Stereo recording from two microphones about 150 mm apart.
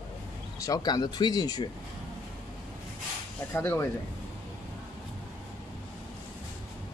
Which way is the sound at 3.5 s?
15° left (ahead or behind).